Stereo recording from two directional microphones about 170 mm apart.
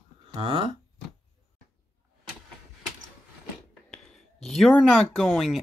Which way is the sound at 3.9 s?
5° left (ahead or behind).